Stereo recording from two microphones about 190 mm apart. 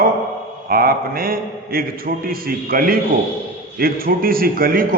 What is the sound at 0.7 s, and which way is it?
A man's voice, 50° right (ahead or behind).